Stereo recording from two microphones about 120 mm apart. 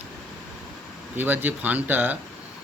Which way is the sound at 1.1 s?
15° right (ahead or behind).